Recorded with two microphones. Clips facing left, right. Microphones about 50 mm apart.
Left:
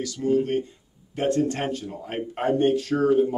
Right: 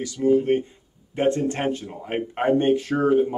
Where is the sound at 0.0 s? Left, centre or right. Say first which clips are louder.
Right 3 dB; centre.